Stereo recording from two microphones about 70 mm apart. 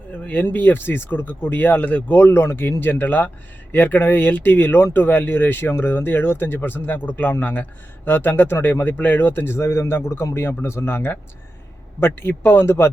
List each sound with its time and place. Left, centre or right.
0.1 s speech: left